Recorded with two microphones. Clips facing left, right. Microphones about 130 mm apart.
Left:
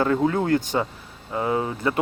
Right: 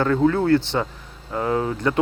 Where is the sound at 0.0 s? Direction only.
15° left (ahead or behind).